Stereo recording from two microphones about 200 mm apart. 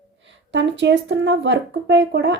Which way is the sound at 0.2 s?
65° right (ahead or behind).